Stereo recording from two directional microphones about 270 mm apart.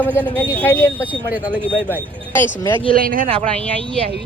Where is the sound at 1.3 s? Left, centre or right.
Centre.